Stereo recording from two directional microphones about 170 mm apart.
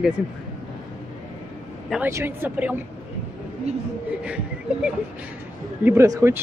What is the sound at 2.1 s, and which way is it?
Speech, 10° right (ahead or behind).